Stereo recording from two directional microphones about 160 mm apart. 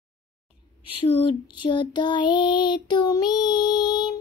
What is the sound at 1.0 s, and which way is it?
Child singing, 30° left (ahead or behind).